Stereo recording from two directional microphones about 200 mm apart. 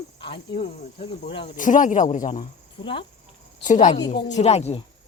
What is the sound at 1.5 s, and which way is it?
Speech, 40° left (ahead or behind).